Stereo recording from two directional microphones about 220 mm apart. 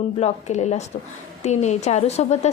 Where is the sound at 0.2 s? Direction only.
30° left (ahead or behind).